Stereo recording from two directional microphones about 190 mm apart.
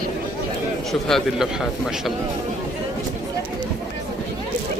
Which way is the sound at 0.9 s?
Centre (ahead or behind).